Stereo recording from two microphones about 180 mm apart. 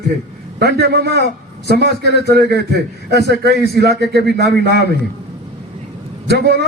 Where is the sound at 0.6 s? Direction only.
65° right (ahead or behind).